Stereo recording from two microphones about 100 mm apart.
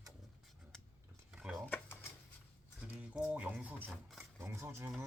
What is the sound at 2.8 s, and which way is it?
Speech, 15° right (ahead or behind).